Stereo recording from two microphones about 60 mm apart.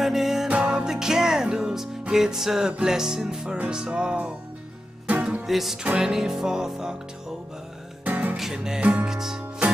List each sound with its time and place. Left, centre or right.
0.0 s music: centre
0.5 s music: right
5.5 s music: centre
5.9 s music: centre
8.0 s music: right
8.4 s music: centre
8.8 s music: right
9.1 s music: centre